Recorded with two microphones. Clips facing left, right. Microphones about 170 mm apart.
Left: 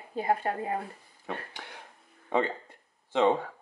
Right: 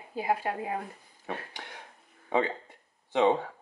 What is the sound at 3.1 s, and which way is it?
Speech, 15° right (ahead or behind).